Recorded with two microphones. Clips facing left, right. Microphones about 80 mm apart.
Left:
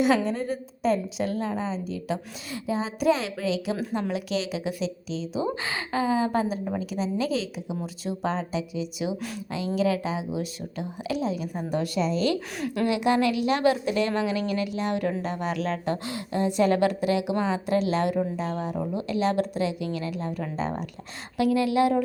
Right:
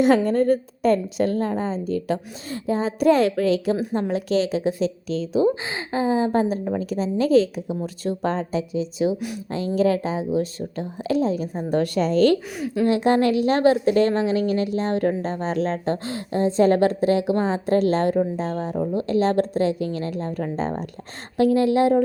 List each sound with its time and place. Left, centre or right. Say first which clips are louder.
0.0 s a woman's voice: right 6 dB; right
5.6 s a woman's voice: right 3 dB; right
12.5 s a woman's voice: right 3 dB; centre
12.9 s a woman's voice: right 5 dB; right